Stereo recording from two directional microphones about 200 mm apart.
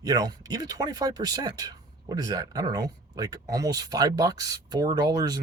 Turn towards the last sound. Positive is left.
turn(degrees=-20)  # may be behind; listen again after turning